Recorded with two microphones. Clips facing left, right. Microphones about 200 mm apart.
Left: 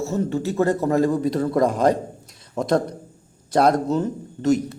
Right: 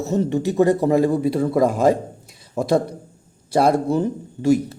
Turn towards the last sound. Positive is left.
turn(degrees=-10)  # may be behind; listen again after turning